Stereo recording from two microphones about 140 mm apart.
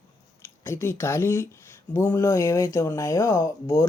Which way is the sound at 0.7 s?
20° left (ahead or behind).